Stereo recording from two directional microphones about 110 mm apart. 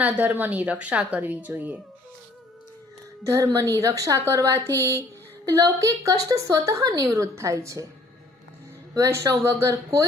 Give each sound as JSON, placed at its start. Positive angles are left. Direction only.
{"t": 0.0, "sound": "a woman's voice", "side_deg": -15}
{"t": 3.2, "sound": "a woman's voice", "side_deg": -30}
{"t": 9.0, "sound": "a woman's voice", "side_deg": -25}